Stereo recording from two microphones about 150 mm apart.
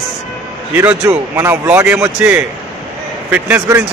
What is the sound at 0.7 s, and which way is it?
Speech, 20° right (ahead or behind).